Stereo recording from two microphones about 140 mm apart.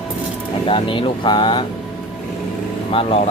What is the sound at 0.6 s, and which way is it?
Speech, 40° left (ahead or behind).